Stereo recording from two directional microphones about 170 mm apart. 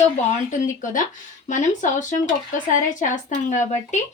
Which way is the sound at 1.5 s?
50° left (ahead or behind).